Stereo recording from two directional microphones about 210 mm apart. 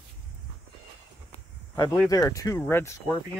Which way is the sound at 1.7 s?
15° left (ahead or behind).